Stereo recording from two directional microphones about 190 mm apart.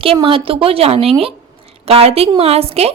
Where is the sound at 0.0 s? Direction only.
30° right (ahead or behind).